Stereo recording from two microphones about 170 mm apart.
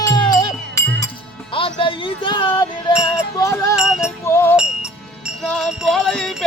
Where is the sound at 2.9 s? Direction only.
25° left (ahead or behind).